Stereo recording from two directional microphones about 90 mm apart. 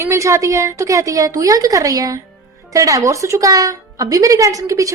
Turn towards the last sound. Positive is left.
turn(degrees=-40)  # may be behind; listen again after turning